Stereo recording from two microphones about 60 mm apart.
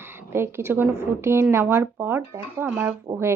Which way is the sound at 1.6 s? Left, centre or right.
Right.